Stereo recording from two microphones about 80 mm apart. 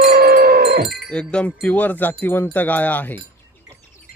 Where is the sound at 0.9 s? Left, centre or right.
Centre.